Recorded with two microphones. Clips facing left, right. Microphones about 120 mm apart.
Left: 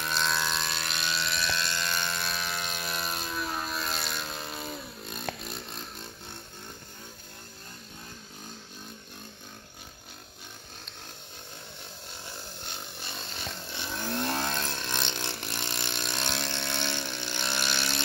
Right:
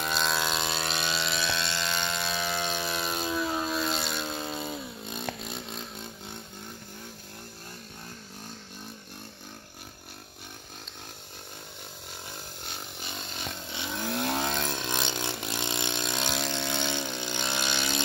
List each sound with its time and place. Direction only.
0.0 s vehicle: 10° right (ahead or behind)
0.7 s vehicle: 25° right (ahead or behind)
13.7 s vehicle: 15° right (ahead or behind)